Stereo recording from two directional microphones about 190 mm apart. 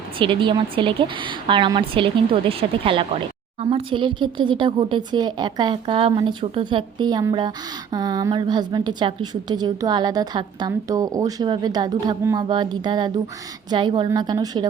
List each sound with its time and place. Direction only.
0.2 s a woman's voice: 25° right (ahead or behind)